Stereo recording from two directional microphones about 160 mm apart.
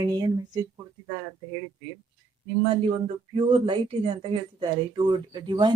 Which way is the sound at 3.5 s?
35° right (ahead or behind).